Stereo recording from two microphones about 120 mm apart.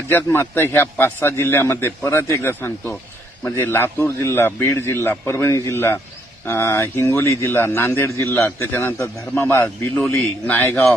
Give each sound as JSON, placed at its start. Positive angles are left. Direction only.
{"t": 0.1, "sound": "a man's voice", "side_deg": 20}